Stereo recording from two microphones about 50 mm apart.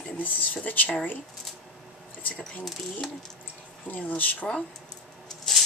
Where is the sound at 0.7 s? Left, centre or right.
Left.